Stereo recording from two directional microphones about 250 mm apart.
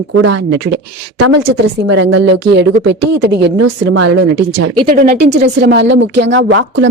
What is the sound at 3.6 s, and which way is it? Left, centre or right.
Speech, right.